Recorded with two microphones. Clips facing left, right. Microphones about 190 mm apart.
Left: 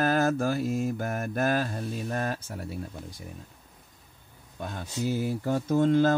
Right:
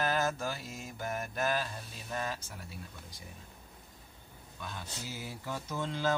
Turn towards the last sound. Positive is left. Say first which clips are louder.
# left 12 dB
turn(degrees=50)  # may be behind; listen again after turning